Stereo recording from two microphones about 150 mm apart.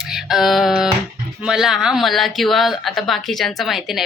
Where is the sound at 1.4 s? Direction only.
5° right (ahead or behind).